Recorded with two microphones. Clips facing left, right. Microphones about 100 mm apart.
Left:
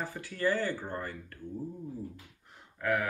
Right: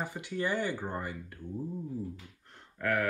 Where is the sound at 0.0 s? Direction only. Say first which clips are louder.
Left 2 dB; 20° right (ahead or behind).